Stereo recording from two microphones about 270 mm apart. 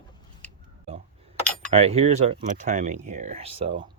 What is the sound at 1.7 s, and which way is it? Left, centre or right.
Speech, right.